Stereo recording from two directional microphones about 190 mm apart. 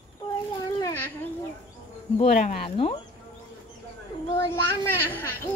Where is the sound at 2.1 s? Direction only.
40° left (ahead or behind).